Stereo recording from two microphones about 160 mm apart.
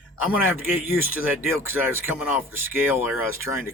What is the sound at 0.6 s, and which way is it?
Speech, 15° right (ahead or behind).